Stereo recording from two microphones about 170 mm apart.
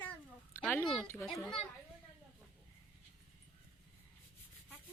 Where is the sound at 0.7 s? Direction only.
5° left (ahead or behind).